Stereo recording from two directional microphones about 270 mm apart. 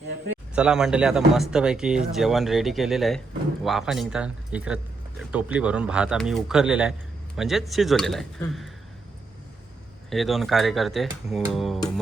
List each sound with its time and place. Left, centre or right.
0.5 s speech: centre
10.1 s speech: centre